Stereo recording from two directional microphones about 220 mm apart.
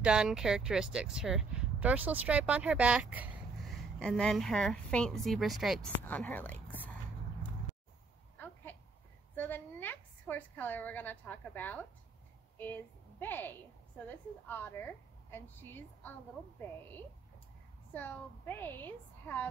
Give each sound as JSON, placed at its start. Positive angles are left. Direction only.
{"t": 0.0, "sound": "a woman's voice", "side_deg": -5}
{"t": 9.3, "sound": "a woman's voice", "side_deg": 10}
{"t": 17.9, "sound": "a woman's voice", "side_deg": 10}